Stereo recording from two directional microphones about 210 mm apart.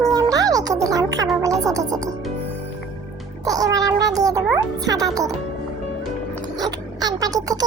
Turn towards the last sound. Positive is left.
turn(degrees=-15)  # may be behind; listen again after turning